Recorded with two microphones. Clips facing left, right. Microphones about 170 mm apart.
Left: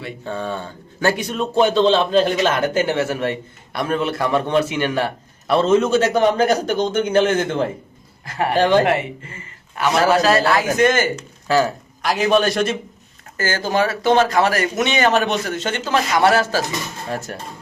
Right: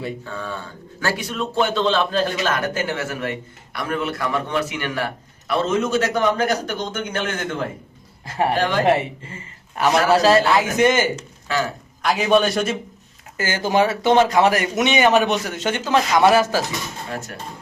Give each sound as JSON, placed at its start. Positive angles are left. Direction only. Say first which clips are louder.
{"t": 0.3, "sound": "a man's voice", "louder": "left 5 dB", "side_deg": 25}
{"t": 9.7, "sound": "a man's voice", "louder": "even", "side_deg": -40}
{"t": 10.3, "sound": "speech", "louder": "even", "side_deg": -20}
{"t": 11.4, "sound": "speech", "louder": "left 6 dB", "side_deg": 35}
{"t": 12.0, "sound": "a man's voice", "louder": "left 1 dB", "side_deg": 0}
{"t": 13.3, "sound": "speech", "louder": "right 1 dB", "side_deg": -15}
{"t": 17.1, "sound": "dishes", "louder": "left 6 dB", "side_deg": 35}